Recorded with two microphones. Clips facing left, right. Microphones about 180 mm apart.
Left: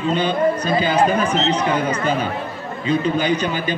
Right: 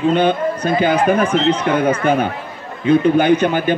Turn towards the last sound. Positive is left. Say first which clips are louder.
# right 6 dB
turn(degrees=-55)  # may be behind; listen again after turning